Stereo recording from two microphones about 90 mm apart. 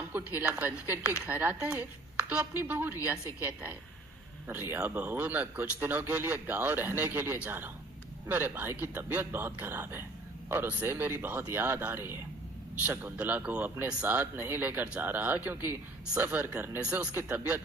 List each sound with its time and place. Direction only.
0.3 s a man's voice: 15° right (ahead or behind)